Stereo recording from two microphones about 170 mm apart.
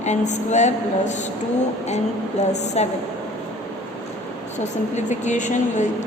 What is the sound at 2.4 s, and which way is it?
Speech, 40° left (ahead or behind).